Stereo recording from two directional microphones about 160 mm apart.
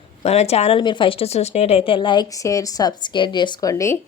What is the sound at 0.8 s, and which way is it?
A woman's voice, 30° left (ahead or behind).